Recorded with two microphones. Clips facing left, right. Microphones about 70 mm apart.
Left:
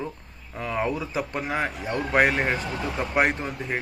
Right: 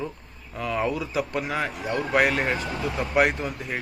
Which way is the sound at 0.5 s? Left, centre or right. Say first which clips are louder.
Right 1 dB; left.